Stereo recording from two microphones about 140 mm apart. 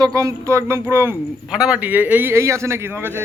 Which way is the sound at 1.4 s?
5° right (ahead or behind).